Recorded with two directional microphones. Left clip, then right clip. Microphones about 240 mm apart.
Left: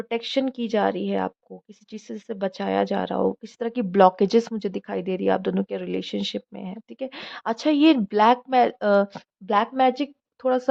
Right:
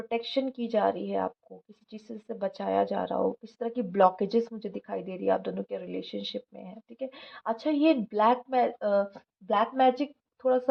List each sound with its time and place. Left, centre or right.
0.1 s speech: left